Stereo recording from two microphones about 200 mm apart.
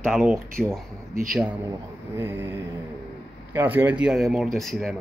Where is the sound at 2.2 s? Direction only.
10° right (ahead or behind).